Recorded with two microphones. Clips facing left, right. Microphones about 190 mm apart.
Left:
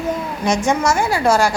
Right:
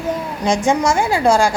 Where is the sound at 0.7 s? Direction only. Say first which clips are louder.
Right 2 dB; 15° right (ahead or behind).